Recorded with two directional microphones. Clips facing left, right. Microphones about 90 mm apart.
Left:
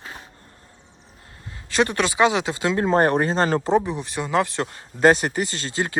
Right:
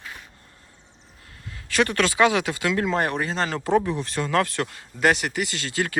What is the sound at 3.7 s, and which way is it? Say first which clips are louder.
Speech: left 1 dB; 20° left (ahead or behind).